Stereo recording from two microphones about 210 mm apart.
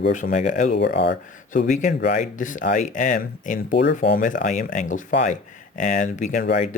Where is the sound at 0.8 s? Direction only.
55° left (ahead or behind).